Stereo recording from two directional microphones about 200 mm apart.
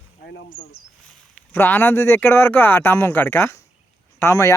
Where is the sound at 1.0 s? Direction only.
5° left (ahead or behind).